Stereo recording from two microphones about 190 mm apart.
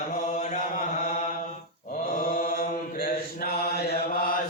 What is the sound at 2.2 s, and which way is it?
Mantra, 50° left (ahead or behind).